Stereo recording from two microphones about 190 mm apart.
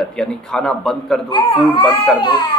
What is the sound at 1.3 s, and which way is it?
Speech, 25° left (ahead or behind).